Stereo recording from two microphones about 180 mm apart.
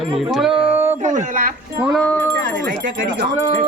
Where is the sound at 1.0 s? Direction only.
45° right (ahead or behind).